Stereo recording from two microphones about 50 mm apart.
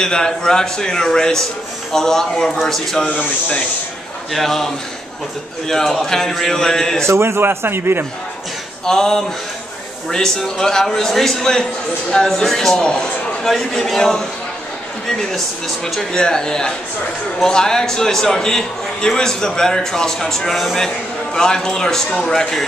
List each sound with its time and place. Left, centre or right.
0.0 s a man's voice: centre
4.3 s a man's voice: centre
5.7 s a man's voice: centre
7.0 s a man's voice: right
8.8 s a man's voice: centre
13.5 s a man's voice: centre